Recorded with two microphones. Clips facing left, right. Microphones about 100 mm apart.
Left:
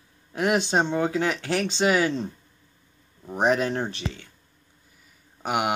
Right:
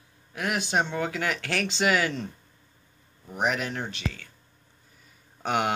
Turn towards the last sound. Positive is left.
turn(degrees=10)  # may be behind; listen again after turning